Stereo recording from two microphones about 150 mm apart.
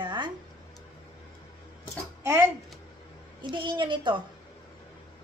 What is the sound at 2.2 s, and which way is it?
Speech, 15° right (ahead or behind).